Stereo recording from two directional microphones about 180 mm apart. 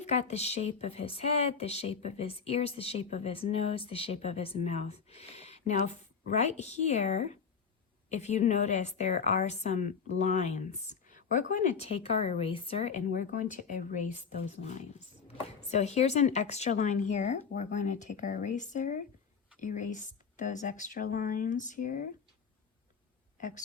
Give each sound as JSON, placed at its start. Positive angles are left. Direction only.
{"t": 0.0, "sound": "speech", "side_deg": 35}
{"t": 13.1, "sound": "speech", "side_deg": 45}
{"t": 23.4, "sound": "a woman's voice", "side_deg": 45}